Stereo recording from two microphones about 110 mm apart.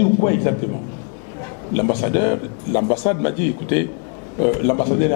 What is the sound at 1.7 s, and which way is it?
Speech, 15° left (ahead or behind).